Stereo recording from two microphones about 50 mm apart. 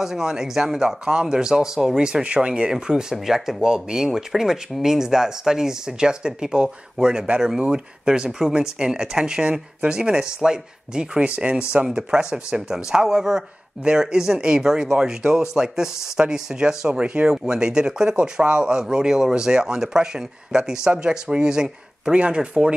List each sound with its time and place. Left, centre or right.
0.0 s speech: centre